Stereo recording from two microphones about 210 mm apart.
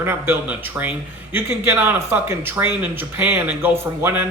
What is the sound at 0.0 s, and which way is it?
A man's voice, 10° right (ahead or behind).